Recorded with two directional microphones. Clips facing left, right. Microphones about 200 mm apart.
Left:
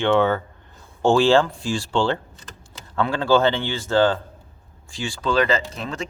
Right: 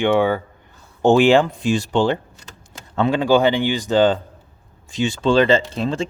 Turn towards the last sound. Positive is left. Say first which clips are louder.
# right 7 dB
turn(degrees=-30)  # may be behind; listen again after turning